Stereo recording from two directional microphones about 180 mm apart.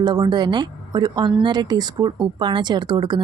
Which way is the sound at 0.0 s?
25° right (ahead or behind).